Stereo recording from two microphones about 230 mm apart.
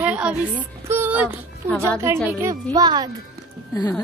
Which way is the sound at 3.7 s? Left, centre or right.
Centre.